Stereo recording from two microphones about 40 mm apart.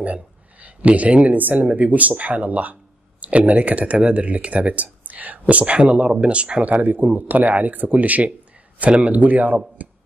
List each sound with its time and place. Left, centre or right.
0.0 s speech: right
7.1 s speech: right
9.8 s a sound: right